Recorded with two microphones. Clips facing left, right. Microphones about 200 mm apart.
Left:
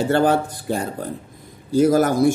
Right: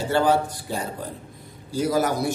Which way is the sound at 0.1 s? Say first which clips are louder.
Even; 50° left (ahead or behind).